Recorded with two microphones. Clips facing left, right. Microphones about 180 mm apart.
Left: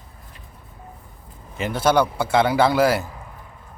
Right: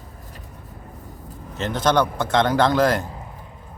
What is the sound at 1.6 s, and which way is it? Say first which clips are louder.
Speech: left 1 dB; 10° left (ahead or behind).